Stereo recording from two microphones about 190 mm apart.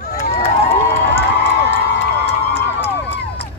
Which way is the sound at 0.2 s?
35° left (ahead or behind).